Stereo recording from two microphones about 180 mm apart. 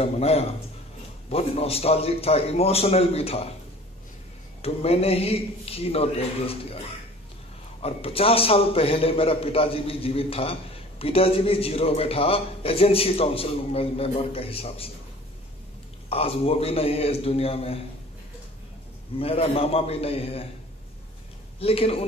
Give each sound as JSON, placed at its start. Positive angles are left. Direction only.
{"t": 0.0, "sound": "a man's voice", "side_deg": 35}
{"t": 4.6, "sound": "a man's voice", "side_deg": 35}
{"t": 7.8, "sound": "a man's voice", "side_deg": 30}
{"t": 16.1, "sound": "a man's voice", "side_deg": 30}
{"t": 19.1, "sound": "a man's voice", "side_deg": 35}
{"t": 21.5, "sound": "a man's voice", "side_deg": 35}